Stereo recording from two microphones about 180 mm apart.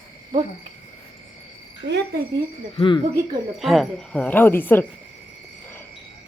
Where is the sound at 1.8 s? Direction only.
90° right.